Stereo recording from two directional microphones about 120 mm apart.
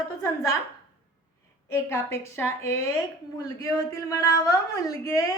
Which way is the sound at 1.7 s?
20° left (ahead or behind).